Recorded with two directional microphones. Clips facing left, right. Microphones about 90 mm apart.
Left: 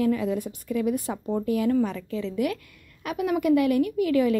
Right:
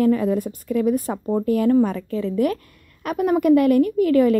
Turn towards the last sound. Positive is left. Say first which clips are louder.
# right 6 dB
turn(degrees=-50)  # may be behind; listen again after turning